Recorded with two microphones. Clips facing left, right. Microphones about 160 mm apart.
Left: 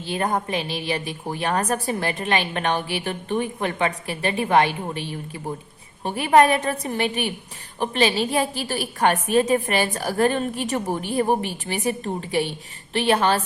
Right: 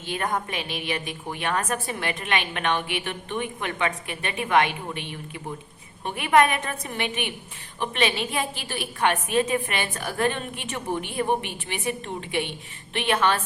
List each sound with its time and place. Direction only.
0.0 s a woman's voice: 30° left (ahead or behind)